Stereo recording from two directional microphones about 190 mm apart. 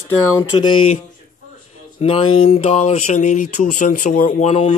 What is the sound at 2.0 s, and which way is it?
Speech, 30° left (ahead or behind).